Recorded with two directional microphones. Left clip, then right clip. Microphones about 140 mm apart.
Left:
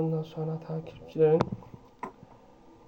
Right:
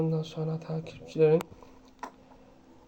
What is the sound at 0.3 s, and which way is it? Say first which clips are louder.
Speech: even; 30° right (ahead or behind).